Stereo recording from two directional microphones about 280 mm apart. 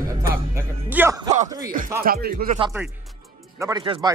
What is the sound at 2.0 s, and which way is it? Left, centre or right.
Speech, right.